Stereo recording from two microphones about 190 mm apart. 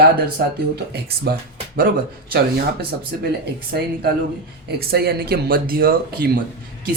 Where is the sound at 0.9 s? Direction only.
55° right (ahead or behind).